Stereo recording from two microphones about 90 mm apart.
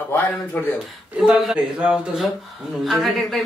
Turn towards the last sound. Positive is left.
turn(degrees=0)  # may be behind; listen again after turning